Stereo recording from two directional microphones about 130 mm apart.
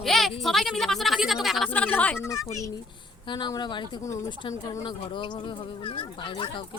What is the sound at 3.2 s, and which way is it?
Speech, 35° left (ahead or behind).